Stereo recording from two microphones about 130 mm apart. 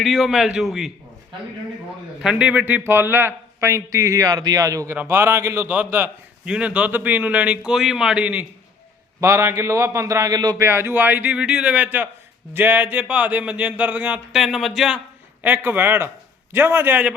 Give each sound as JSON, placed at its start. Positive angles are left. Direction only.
{"t": 0.0, "sound": "a man's voice", "side_deg": 0}
{"t": 2.2, "sound": "a man's voice", "side_deg": -5}
{"t": 9.2, "sound": "a man's voice", "side_deg": -20}
{"t": 15.4, "sound": "a man's voice", "side_deg": -15}